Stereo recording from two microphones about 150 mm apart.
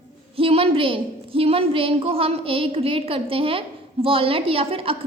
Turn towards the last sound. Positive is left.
turn(degrees=-40)  # may be behind; listen again after turning